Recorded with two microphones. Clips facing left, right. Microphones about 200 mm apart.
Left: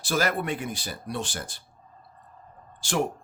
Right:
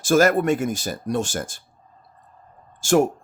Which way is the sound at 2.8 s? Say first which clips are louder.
Right 9 dB; 45° right (ahead or behind).